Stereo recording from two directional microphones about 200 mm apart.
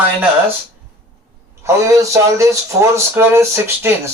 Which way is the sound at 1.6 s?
15° right (ahead or behind).